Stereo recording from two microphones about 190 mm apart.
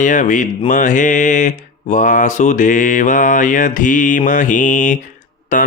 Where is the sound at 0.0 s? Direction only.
40° left (ahead or behind).